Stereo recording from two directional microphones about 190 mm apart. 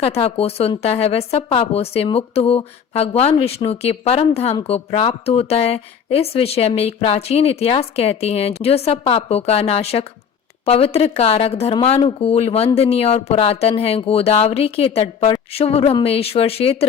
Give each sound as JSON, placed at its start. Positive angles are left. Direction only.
{"t": 0.0, "sound": "speech", "side_deg": 35}